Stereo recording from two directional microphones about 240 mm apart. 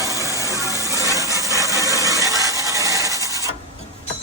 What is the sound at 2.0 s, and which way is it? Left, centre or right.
Rub, centre.